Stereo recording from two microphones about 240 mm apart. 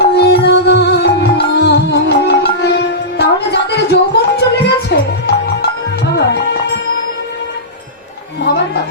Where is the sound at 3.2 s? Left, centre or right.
Left.